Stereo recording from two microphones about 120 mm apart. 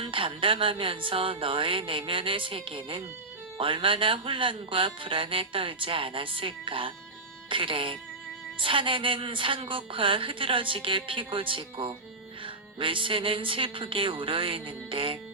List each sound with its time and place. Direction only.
0.0 s speech: 45° right (ahead or behind)